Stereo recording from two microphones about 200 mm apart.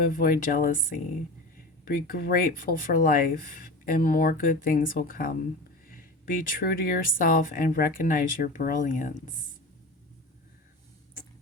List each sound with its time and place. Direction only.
0.2 s speech: 45° left (ahead or behind)